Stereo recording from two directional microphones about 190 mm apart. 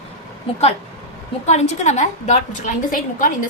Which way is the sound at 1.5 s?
35° left (ahead or behind).